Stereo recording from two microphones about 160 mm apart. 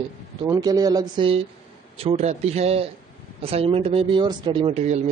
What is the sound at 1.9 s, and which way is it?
Speech, 40° right (ahead or behind).